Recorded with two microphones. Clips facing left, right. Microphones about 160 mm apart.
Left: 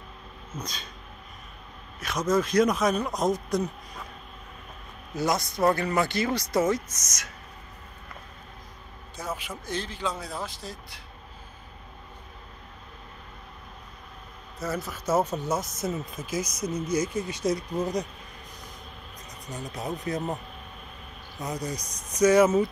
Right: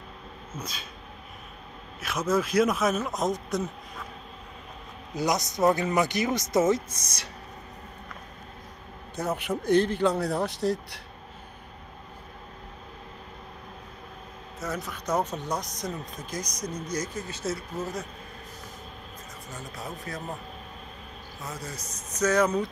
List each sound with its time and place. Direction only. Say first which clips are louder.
0.6 s a sound: left 1 dB; 5° right (ahead or behind)
2.0 s speech: left 1 dB; 5° right (ahead or behind)
5.1 s speech: even; 20° right (ahead or behind)
9.1 s a man's voice: right 6 dB; 60° right (ahead or behind)
14.6 s speech: left 2 dB; centre (ahead or behind)
19.7 s speech: left 7 dB; 20° left (ahead or behind)
21.4 s speech: left 6 dB; 15° left (ahead or behind)